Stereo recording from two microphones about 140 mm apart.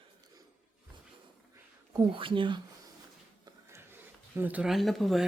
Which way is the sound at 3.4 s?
20° right (ahead or behind).